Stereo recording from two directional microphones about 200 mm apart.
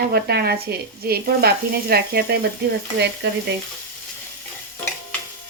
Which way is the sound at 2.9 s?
55° right (ahead or behind).